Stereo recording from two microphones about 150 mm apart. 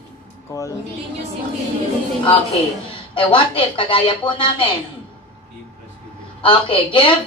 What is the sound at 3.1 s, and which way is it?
A woman's voice, 35° left (ahead or behind).